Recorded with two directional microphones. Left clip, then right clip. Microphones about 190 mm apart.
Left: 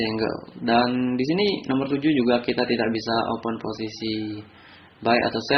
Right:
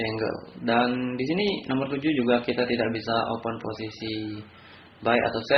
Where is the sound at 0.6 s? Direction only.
50° left (ahead or behind).